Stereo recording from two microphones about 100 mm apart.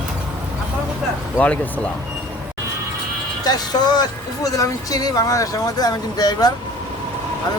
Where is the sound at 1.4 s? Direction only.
15° left (ahead or behind).